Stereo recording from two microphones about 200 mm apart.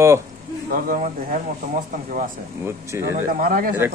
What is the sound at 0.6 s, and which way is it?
Speech, 45° right (ahead or behind).